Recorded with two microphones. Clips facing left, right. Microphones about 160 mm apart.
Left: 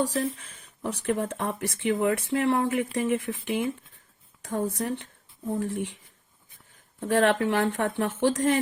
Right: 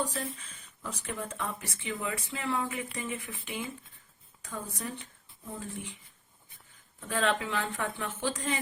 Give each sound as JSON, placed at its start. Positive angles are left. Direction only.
{"t": 0.0, "sound": "speech", "side_deg": 70}
{"t": 4.8, "sound": "speech", "side_deg": 75}
{"t": 7.1, "sound": "speech", "side_deg": 70}